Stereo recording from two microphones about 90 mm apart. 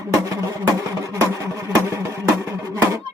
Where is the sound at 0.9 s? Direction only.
35° right (ahead or behind).